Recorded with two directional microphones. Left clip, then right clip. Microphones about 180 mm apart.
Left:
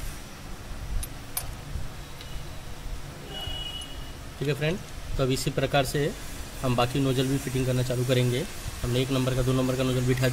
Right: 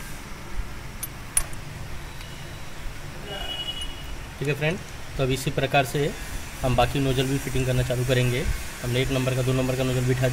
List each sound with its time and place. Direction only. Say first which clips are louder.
4.5 s speech: right 3 dB; 20° left (ahead or behind)